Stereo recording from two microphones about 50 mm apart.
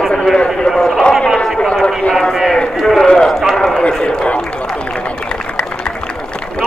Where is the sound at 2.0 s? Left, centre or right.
Centre.